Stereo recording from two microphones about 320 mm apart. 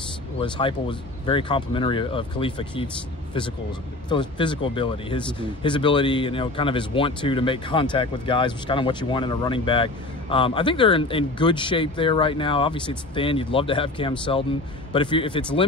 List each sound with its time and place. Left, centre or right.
0.4 s speech: centre
4.1 s speech: centre